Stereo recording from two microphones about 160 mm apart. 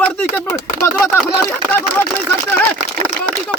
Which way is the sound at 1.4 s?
15° left (ahead or behind).